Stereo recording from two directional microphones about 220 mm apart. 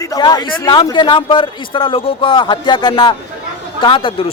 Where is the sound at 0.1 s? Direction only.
15° left (ahead or behind).